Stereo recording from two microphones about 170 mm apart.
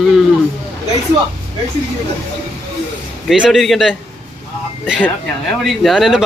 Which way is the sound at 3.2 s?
Centre (ahead or behind).